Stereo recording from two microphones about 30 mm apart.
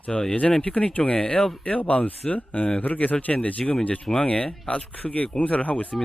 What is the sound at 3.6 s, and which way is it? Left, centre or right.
Speech, left.